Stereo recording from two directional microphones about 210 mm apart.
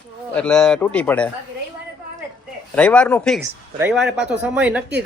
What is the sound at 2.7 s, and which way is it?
A man's voice, 5° left (ahead or behind).